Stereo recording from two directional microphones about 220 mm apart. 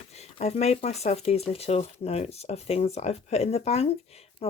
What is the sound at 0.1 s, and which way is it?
Speech, 30° left (ahead or behind).